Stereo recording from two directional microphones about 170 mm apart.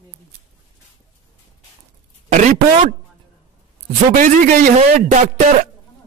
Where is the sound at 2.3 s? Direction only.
45° right (ahead or behind).